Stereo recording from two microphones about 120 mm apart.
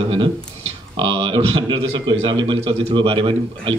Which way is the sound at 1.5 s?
35° right (ahead or behind).